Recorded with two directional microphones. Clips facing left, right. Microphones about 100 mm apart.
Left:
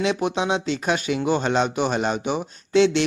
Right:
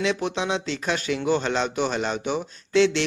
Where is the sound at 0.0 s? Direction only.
15° left (ahead or behind).